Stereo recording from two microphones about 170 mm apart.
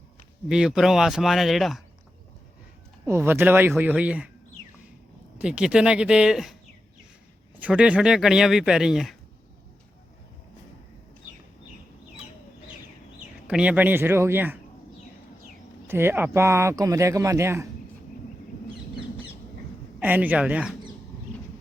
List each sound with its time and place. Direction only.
0.4 s speech: 5° right (ahead or behind)
3.1 s speech: 15° right (ahead or behind)
5.4 s speech: 5° right (ahead or behind)
7.6 s speech: 5° right (ahead or behind)
13.1 s speech: 5° right (ahead or behind)
15.9 s speech: 15° right (ahead or behind)
20.0 s speech: 10° right (ahead or behind)